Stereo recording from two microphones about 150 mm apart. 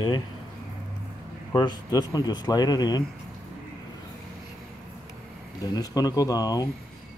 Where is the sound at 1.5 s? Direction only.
30° left (ahead or behind).